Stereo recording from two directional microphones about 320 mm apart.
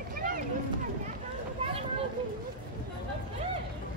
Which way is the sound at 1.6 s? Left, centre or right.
Centre.